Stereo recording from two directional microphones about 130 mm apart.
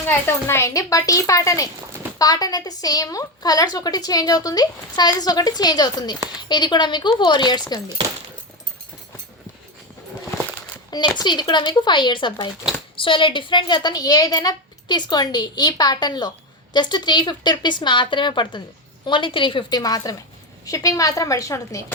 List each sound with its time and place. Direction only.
0.1 s a woman's voice: 20° left (ahead or behind)
10.9 s a woman's voice: 35° left (ahead or behind)